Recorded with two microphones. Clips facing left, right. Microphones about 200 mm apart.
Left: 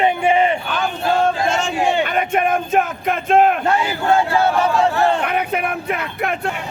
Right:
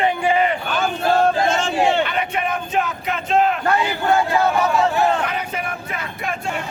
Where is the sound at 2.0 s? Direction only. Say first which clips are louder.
Left 5 dB; 50° left (ahead or behind).